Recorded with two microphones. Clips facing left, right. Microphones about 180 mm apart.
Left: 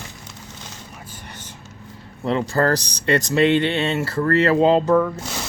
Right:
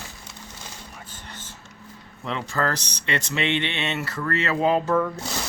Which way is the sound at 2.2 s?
35° left (ahead or behind).